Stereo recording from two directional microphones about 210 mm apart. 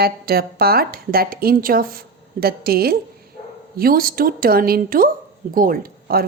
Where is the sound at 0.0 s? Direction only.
45° right (ahead or behind).